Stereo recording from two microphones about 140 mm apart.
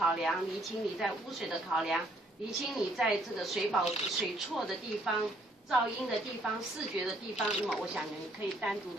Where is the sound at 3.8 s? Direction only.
50° left (ahead or behind).